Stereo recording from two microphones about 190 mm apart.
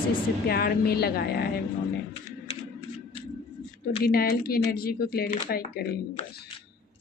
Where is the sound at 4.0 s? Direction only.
55° left (ahead or behind).